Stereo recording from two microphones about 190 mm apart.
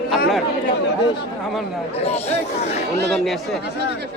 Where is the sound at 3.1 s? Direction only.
Centre (ahead or behind).